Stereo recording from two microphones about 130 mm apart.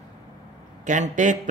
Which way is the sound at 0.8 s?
75° right (ahead or behind).